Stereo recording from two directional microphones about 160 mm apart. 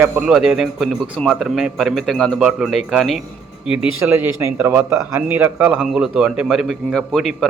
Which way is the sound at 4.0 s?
15° right (ahead or behind).